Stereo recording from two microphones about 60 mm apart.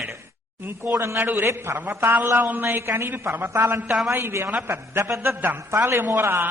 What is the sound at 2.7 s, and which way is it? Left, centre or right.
A man's voice, right.